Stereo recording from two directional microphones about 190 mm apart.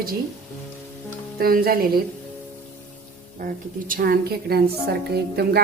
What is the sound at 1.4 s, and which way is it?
Speech, 50° right (ahead or behind).